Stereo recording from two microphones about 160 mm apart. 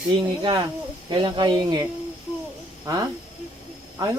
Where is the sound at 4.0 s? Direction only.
20° right (ahead or behind).